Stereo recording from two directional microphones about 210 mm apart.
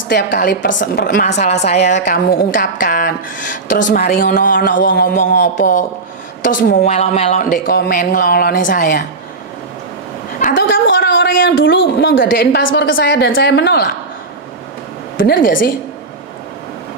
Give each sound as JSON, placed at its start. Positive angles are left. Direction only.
{"t": 0.1, "sound": "a woman's voice", "side_deg": 50}
{"t": 0.7, "sound": "a man's voice", "side_deg": 60}
{"t": 1.0, "sound": "a woman's voice", "side_deg": 40}
{"t": 6.9, "sound": "speech", "side_deg": 30}
{"t": 7.5, "sound": "speech", "side_deg": 40}
{"t": 10.5, "sound": "a man's voice", "side_deg": 60}
{"t": 15.1, "sound": "speech", "side_deg": 40}